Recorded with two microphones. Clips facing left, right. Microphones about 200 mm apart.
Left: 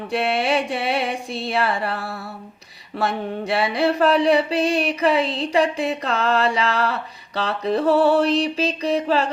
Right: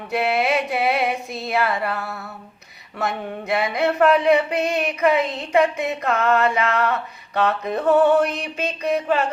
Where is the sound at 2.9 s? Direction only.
30° left (ahead or behind).